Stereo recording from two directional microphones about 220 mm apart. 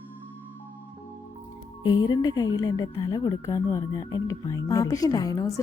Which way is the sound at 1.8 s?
20° left (ahead or behind).